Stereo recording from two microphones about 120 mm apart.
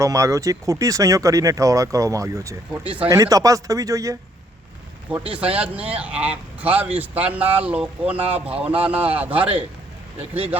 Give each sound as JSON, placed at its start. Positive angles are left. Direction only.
{"t": 0.0, "sound": "speech", "side_deg": -25}
{"t": 5.3, "sound": "speech", "side_deg": -10}